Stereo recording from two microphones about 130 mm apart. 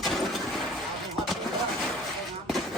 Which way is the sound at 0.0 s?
Centre (ahead or behind).